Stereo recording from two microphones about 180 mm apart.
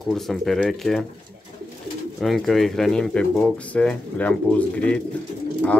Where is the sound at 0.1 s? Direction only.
Centre (ahead or behind).